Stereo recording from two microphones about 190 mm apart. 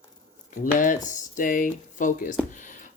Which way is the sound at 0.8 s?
40° left (ahead or behind).